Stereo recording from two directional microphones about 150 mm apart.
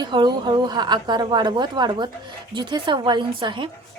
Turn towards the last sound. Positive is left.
turn(degrees=-35)  # may be behind; listen again after turning